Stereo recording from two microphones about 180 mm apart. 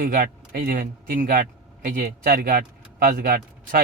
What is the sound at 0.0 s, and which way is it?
A man's voice, 50° right (ahead or behind).